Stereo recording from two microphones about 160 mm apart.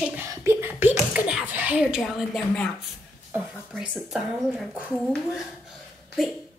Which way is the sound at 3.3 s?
5° right (ahead or behind).